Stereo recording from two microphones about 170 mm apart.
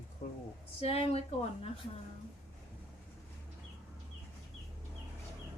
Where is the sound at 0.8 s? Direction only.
35° left (ahead or behind).